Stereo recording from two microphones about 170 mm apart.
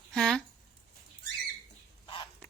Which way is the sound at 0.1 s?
5° left (ahead or behind).